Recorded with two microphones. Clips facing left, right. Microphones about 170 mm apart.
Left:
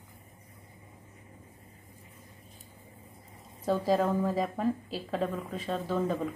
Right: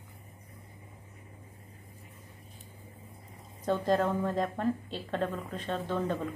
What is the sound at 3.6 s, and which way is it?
A woman's voice, 5° left (ahead or behind).